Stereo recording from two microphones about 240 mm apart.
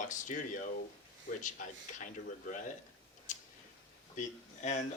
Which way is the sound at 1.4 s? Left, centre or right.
Left.